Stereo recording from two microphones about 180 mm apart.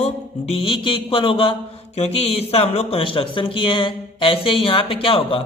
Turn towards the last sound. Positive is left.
turn(degrees=30)  # may be behind; listen again after turning